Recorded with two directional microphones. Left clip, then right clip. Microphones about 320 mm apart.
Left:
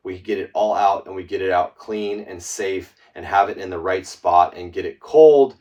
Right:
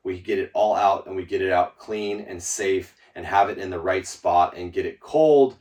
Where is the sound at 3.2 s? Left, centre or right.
Centre.